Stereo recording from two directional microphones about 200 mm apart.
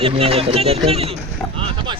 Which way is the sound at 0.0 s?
30° right (ahead or behind).